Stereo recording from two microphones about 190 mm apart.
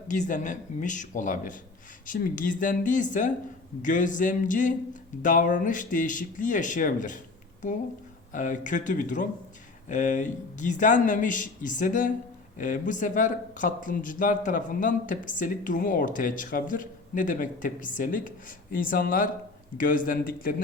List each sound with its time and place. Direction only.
0.1 s speech: 40° left (ahead or behind)
8.3 s speech: 40° left (ahead or behind)